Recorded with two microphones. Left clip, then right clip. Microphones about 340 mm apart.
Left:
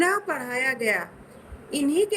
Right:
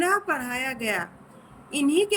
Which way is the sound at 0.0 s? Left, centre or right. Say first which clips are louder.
Even; right.